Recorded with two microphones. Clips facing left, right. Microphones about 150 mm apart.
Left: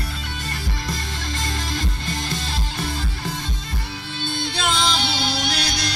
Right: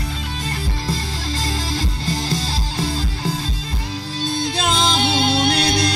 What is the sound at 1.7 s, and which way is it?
Music, 30° right (ahead or behind).